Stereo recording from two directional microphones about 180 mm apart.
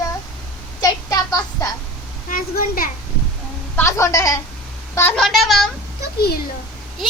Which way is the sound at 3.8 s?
15° left (ahead or behind).